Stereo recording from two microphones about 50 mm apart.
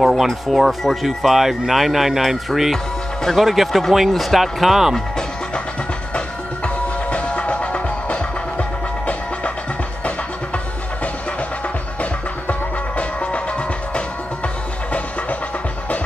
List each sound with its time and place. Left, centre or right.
0.0 s speech: centre
2.7 s music: centre
3.4 s speech: centre
6.1 s music: left
12.0 s music: left